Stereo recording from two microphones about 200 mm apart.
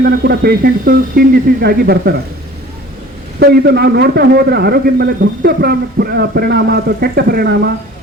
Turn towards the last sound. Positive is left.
turn(degrees=-55)  # may be behind; listen again after turning